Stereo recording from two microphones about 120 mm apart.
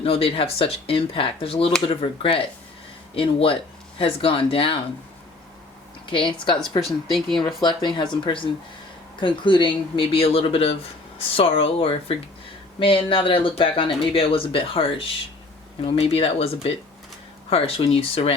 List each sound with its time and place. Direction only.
0.0 s speech: 50° left (ahead or behind)
6.1 s speech: 45° left (ahead or behind)
6.8 s speech: centre (ahead or behind)
7.6 s speech: 40° left (ahead or behind); by 18.3 s 55° left (ahead or behind)